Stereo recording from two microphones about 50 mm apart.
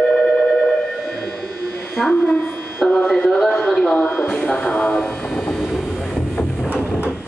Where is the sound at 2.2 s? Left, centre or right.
Centre.